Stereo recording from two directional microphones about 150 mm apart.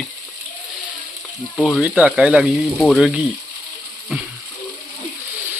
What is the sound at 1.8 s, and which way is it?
Speech, 10° right (ahead or behind).